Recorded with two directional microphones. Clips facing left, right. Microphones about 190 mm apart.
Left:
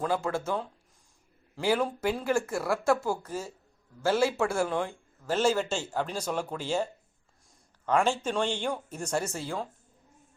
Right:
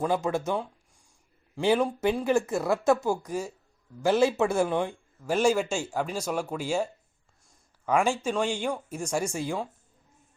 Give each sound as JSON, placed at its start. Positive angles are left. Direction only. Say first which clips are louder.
{"t": 0.0, "sound": "speech", "louder": "right 3 dB", "side_deg": -20}